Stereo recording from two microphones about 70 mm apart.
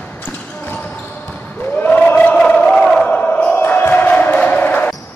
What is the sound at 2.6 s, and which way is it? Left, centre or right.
Crowd, centre.